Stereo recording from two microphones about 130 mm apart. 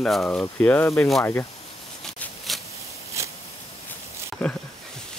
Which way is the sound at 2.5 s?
Centre (ahead or behind).